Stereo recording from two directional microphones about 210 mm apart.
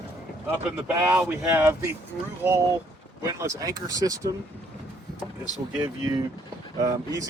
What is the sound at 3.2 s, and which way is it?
Speech, 15° right (ahead or behind).